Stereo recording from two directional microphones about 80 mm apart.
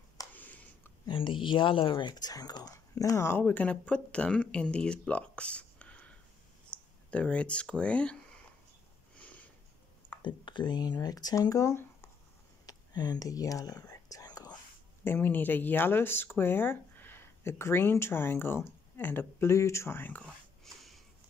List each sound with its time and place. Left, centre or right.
0.3 s a sound: left
1.0 s speech: left
2.1 s speech: left
3.4 s speech: centre
6.7 s a sound: centre
7.1 s speech: centre
10.2 s speech: left
12.6 s whispering: left
15.0 s speech: left
19.5 s speech: left
20.6 s a sound: centre